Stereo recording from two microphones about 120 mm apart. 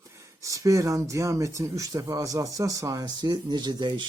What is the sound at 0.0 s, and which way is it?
Speech, 25° right (ahead or behind).